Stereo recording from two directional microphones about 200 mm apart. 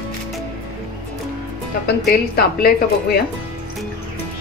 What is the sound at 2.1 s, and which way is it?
A woman's voice, 50° left (ahead or behind).